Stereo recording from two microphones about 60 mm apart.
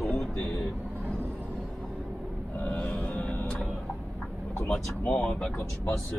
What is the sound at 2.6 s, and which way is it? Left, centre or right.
Vehicle, left.